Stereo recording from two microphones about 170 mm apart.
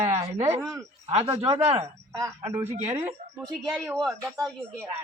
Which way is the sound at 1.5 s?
35° right (ahead or behind).